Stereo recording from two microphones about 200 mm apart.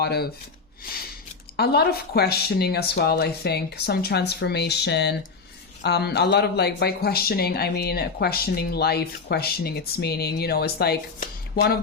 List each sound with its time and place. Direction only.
0.0 s speech: 55° left (ahead or behind)
1.5 s speech: 55° left (ahead or behind)